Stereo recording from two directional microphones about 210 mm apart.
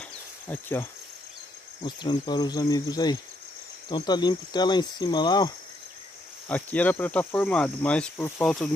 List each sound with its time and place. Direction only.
0.5 s cricket: 10° left (ahead or behind)
1.8 s speech: 20° left (ahead or behind)
6.5 s cricket: 5° left (ahead or behind)